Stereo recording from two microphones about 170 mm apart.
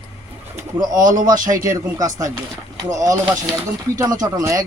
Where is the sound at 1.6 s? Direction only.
20° right (ahead or behind).